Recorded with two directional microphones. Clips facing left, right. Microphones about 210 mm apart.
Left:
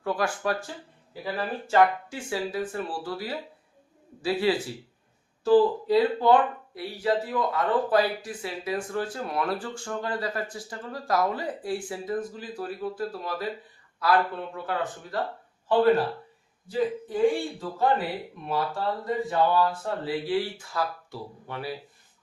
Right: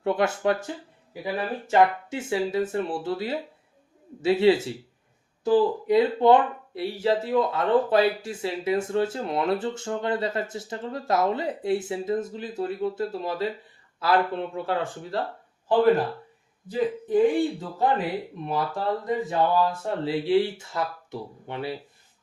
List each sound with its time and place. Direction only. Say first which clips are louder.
0.0 s speech: right 4 dB; 25° right (ahead or behind)
17.1 s speech: right 6 dB; 20° right (ahead or behind)